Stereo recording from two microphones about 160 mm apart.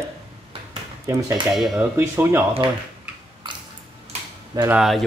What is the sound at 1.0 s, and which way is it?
Speech, 20° right (ahead or behind).